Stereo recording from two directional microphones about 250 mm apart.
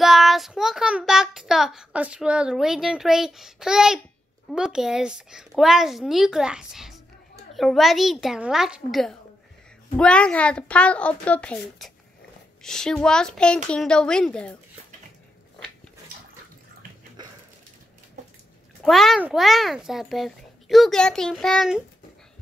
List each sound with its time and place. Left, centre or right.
0.0 s child singing: centre
4.5 s a child's voice: centre
17.2 s a sound: centre
18.8 s a child's voice: centre